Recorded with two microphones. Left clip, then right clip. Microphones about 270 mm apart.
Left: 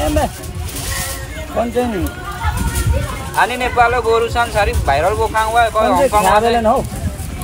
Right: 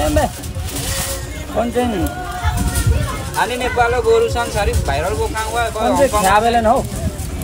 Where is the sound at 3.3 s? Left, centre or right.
Centre.